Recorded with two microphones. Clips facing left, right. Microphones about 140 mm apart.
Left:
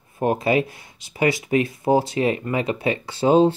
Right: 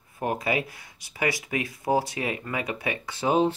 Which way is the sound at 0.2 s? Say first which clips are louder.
Left 7 dB; 25° left (ahead or behind).